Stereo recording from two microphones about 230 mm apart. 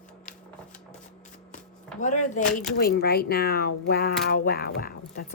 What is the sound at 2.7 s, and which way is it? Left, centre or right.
Speech, left.